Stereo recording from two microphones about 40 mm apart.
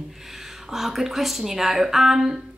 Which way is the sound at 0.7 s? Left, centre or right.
Centre.